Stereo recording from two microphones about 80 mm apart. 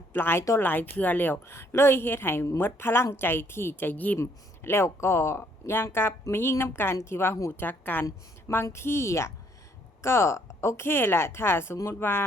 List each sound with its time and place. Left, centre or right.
0.1 s a woman's voice: left
0.7 s a woman's voice: left
4.2 s a woman's voice: left
8.0 s a woman's voice: left